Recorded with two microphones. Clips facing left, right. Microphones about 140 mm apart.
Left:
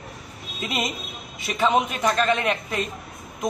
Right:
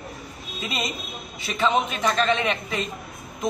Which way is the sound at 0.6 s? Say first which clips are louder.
Left 2 dB; 5° left (ahead or behind).